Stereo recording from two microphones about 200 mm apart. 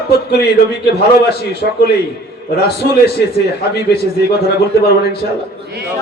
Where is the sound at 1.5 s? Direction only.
55° left (ahead or behind).